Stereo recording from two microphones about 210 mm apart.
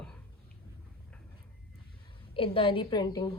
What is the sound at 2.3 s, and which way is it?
A woman's voice, 25° left (ahead or behind).